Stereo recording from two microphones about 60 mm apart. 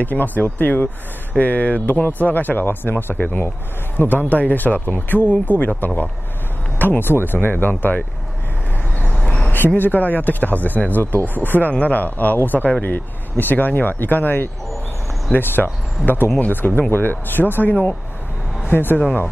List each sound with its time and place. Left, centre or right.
0.0 s speech: left
9.0 s a sound: left
9.8 s speech: left